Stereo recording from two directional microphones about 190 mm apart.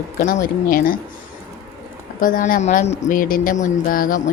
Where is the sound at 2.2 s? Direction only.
45° left (ahead or behind).